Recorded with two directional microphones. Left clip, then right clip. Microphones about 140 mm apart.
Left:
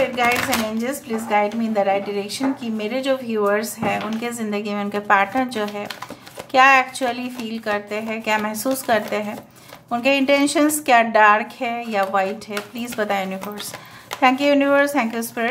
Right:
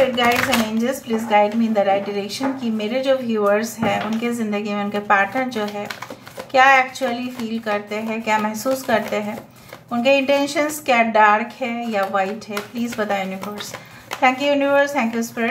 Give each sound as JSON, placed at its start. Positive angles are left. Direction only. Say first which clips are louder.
{"t": 0.7, "sound": "a woman's voice", "louder": "right 3 dB", "side_deg": 25}